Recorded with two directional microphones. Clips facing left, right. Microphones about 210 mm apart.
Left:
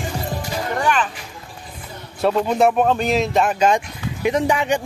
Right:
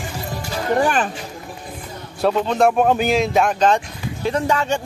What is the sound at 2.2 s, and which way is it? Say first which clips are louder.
Speech: even; centre (ahead or behind).